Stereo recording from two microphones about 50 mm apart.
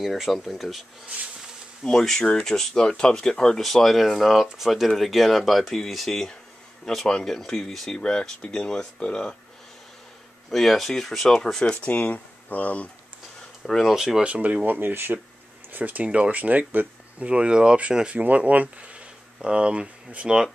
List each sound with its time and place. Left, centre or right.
0.0 s speech: centre
1.9 s speech: centre
7.2 s speech: centre
7.9 s speech: centre
10.5 s speech: centre
11.8 s speech: left
13.8 s speech: centre
14.2 s speech: right
15.7 s speech: right
18.1 s speech: right